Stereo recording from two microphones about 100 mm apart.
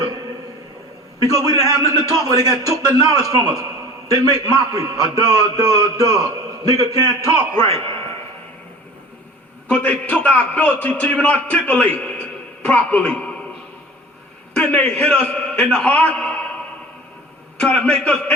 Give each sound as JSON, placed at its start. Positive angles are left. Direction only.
{"t": 1.2, "sound": "a man's voice", "side_deg": -35}
{"t": 7.8, "sound": "a sound", "side_deg": -65}
{"t": 9.6, "sound": "a man's voice", "side_deg": 15}
{"t": 14.5, "sound": "a man's voice", "side_deg": 15}
{"t": 17.6, "sound": "a man's voice", "side_deg": 10}